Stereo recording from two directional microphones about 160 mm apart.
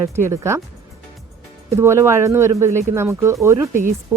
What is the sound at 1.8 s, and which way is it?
Speech, 15° right (ahead or behind).